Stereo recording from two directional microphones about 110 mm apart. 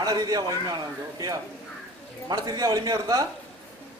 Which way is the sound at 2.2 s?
40° right (ahead or behind).